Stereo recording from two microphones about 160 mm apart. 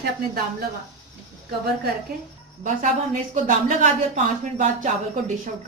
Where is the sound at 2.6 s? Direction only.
55° right (ahead or behind).